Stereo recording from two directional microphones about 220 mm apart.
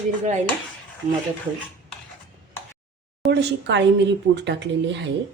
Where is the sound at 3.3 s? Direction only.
55° right (ahead or behind).